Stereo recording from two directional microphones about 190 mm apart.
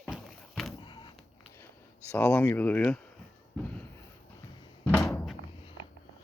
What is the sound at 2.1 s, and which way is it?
Speech, 10° left (ahead or behind).